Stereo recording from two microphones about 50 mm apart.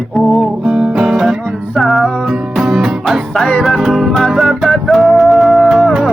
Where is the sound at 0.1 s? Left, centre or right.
Centre.